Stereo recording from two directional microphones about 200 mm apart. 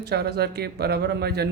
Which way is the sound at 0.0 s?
55° right (ahead or behind).